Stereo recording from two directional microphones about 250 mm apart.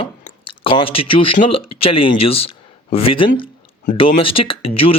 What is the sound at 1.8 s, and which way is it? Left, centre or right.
Speech, left.